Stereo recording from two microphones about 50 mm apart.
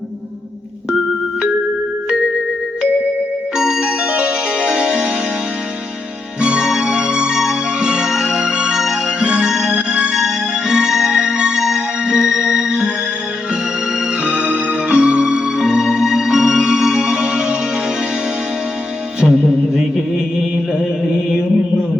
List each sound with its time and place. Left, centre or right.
3.5 s music: centre
6.4 s music: centre
14.3 s music: centre
19.2 s music: centre